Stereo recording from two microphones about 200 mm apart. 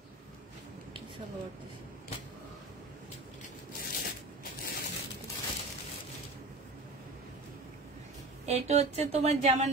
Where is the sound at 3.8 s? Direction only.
50° left (ahead or behind).